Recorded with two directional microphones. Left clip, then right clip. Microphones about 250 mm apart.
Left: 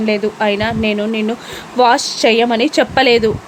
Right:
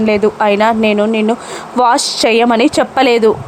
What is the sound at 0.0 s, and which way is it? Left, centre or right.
A woman's voice, centre.